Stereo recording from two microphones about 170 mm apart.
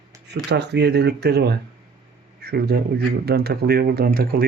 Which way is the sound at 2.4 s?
70° right (ahead or behind).